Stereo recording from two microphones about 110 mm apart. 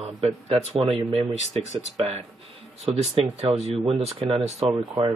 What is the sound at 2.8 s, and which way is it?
Speech, 75° right (ahead or behind).